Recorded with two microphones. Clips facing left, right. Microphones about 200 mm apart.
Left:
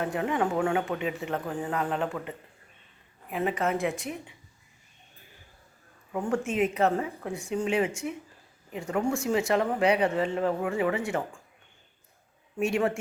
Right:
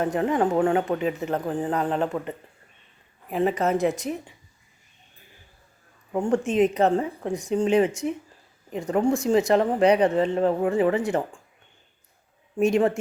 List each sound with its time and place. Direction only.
0.0 s speech: 40° right (ahead or behind)
3.3 s speech: 35° right (ahead or behind)
6.1 s speech: 30° right (ahead or behind)
12.5 s speech: 35° right (ahead or behind)